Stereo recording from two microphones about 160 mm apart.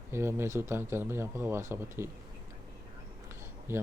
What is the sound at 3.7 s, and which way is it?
Speech, 15° right (ahead or behind).